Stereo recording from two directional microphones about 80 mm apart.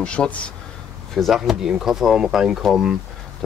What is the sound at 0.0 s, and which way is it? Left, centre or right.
Speech, centre.